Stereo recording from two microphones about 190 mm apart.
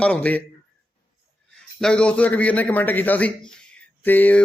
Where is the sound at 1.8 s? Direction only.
5° left (ahead or behind).